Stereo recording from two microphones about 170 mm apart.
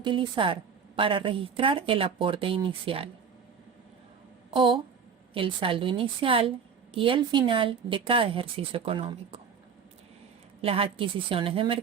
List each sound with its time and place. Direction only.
0.0 s a woman's voice: 30° right (ahead or behind)
4.5 s a woman's voice: 30° right (ahead or behind)
10.6 s a woman's voice: 35° right (ahead or behind)